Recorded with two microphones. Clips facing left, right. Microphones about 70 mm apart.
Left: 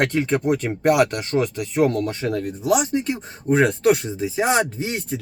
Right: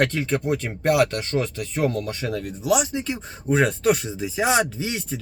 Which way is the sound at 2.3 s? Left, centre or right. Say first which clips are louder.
Left 1 dB; left.